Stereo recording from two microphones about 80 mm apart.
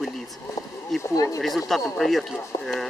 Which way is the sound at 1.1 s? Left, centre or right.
Left.